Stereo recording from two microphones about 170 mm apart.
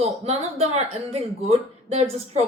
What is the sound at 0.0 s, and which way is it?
Speech, 40° right (ahead or behind).